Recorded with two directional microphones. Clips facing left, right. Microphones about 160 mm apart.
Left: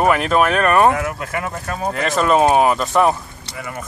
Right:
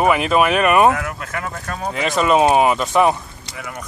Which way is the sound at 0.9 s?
5° left (ahead or behind).